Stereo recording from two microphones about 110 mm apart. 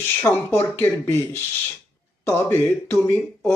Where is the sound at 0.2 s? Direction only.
20° left (ahead or behind).